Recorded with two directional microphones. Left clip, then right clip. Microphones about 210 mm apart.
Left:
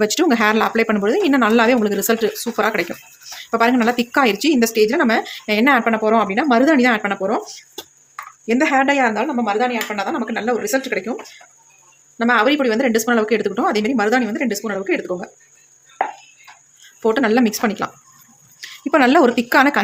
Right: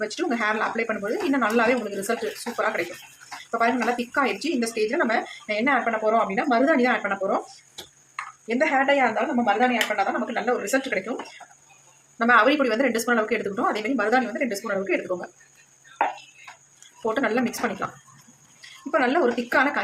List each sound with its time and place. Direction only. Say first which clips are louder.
0.0 s speech: left 9 dB; 50° left (ahead or behind)
8.4 s speech: left 5 dB; 50° left (ahead or behind)
12.2 s speech: left 3 dB; 40° left (ahead or behind)
17.0 s speech: left 8 dB; 50° left (ahead or behind)